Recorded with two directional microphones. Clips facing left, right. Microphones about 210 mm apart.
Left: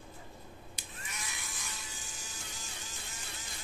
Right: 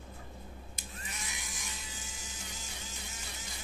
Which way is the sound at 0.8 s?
45° right (ahead or behind).